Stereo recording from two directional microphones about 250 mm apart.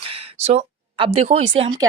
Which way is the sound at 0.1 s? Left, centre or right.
Right.